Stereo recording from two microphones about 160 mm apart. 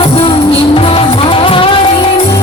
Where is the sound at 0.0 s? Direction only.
35° left (ahead or behind).